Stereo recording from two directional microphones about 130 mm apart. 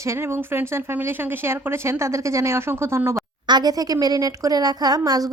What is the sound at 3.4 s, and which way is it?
Speech, 30° right (ahead or behind).